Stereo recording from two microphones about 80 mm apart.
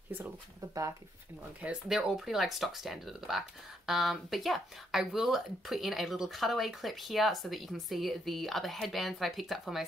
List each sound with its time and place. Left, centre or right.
0.6 s speech: right
1.6 s speech: centre